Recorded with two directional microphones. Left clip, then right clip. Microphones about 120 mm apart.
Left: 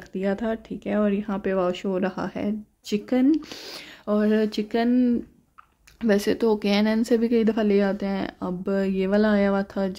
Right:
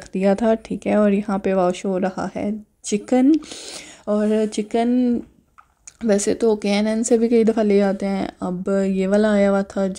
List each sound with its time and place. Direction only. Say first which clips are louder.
0.1 s speech: right 9 dB; 50° right (ahead or behind); by 3.0 s 20° right (ahead or behind)
3.1 s speech: right 5 dB; 30° right (ahead or behind)
3.3 s speech: right 5 dB; 10° right (ahead or behind)
4.8 s speech: right 2 dB; 5° right (ahead or behind); by 9.9 s 25° right (ahead or behind)